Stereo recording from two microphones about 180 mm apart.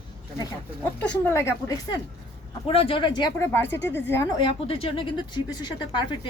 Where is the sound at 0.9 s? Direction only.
10° left (ahead or behind).